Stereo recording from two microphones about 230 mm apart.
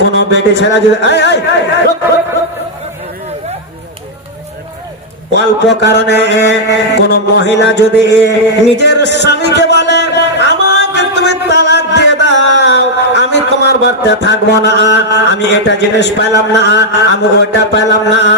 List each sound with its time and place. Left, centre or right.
0.2 s speech: left
5.3 s speech: left
9.8 s music: left
12.5 s a man's voice: left